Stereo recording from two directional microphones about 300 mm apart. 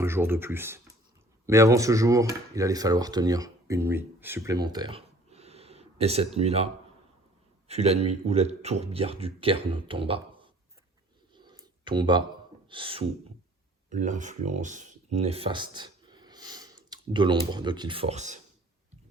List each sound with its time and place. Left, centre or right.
0.0 s speech: centre
7.7 s speech: right
11.3 s a sound: centre
12.6 s speech: centre